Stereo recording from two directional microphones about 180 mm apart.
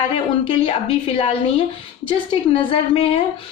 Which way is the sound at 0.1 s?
30° left (ahead or behind).